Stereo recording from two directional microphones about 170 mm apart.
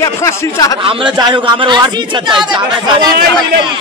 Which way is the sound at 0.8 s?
30° right (ahead or behind).